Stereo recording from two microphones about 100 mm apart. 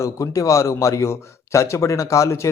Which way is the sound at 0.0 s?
30° left (ahead or behind).